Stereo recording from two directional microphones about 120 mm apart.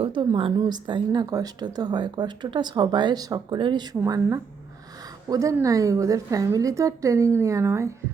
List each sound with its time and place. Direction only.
0.0 s a woman's voice: 40° right (ahead or behind)
4.0 s a woman's voice: 25° right (ahead or behind)